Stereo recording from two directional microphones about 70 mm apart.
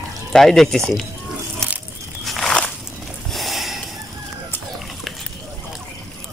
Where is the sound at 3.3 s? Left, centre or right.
Centre.